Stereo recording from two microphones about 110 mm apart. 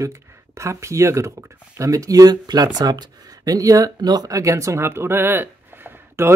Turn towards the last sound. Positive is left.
turn(degrees=-20)  # may be behind; listen again after turning